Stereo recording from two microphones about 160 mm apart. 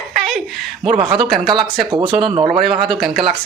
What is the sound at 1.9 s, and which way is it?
Speech, 30° right (ahead or behind).